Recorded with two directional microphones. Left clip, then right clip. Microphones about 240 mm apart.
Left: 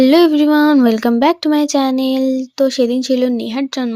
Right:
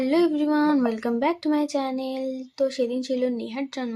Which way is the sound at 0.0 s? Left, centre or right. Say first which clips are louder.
Left 12 dB; left.